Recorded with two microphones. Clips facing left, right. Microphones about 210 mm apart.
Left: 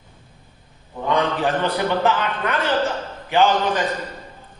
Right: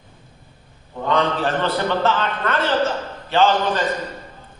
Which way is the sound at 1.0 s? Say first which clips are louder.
Even; 15° left (ahead or behind).